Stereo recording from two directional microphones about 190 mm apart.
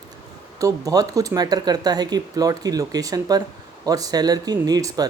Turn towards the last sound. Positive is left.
turn(degrees=-20)  # may be behind; listen again after turning